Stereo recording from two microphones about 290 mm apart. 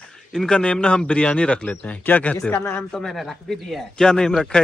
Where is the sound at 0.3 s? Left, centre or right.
Centre.